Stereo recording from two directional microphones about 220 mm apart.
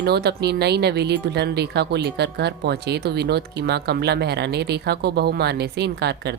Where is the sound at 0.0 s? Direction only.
50° right (ahead or behind).